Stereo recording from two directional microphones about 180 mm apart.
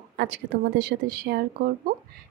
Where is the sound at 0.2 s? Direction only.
60° right (ahead or behind).